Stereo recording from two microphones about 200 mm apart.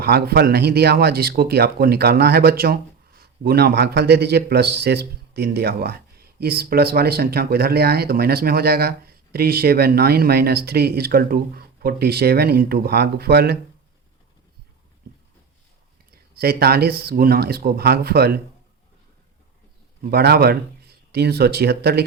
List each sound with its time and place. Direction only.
0.0 s a man's voice: 55° right (ahead or behind)
16.1 s a man's voice: 50° right (ahead or behind)
20.1 s speech: 50° right (ahead or behind)